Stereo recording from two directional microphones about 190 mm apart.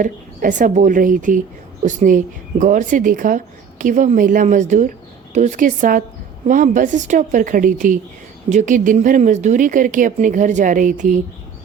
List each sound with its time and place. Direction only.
0.0 s speech: 45° right (ahead or behind)